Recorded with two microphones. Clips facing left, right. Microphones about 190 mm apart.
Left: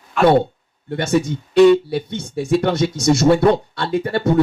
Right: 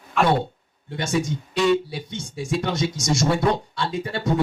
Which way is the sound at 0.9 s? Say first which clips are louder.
Left 6 dB; 60° left (ahead or behind).